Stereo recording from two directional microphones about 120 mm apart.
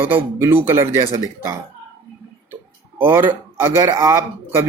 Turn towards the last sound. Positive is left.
turn(degrees=-25)  # may be behind; listen again after turning